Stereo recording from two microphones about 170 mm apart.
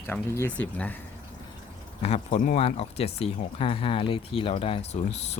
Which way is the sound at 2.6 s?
35° left (ahead or behind).